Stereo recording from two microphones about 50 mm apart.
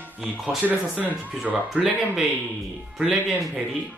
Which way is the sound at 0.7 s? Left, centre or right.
Right.